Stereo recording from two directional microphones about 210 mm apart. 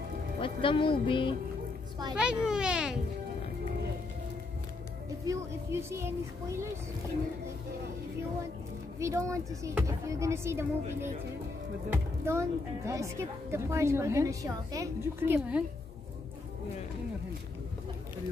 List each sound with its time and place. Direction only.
0.4 s speech: 25° left (ahead or behind)
2.1 s a child's voice: 5° right (ahead or behind)
5.2 s a woman's voice: 15° right (ahead or behind)
9.0 s a woman's voice: 15° right (ahead or behind)